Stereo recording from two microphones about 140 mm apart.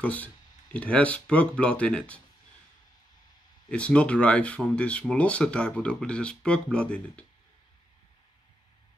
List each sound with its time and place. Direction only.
0.0 s speech: 10° left (ahead or behind)
3.7 s speech: 10° left (ahead or behind)